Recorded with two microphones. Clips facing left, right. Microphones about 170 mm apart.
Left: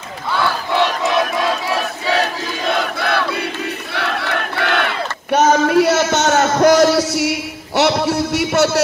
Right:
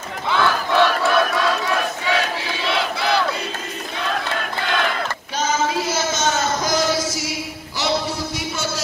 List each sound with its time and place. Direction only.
1.1 s crowd: 25° left (ahead or behind)
2.0 s battle cry: 40° left (ahead or behind); by 3.4 s 60° left (ahead or behind)
3.9 s battle cry: 70° left (ahead or behind)